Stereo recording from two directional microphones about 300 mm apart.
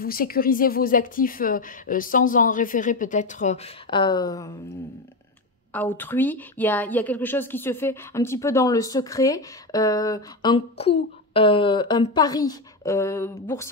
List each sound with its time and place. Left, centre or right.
0.0 s a woman's voice: left; by 4.5 s centre
5.7 s a woman's voice: centre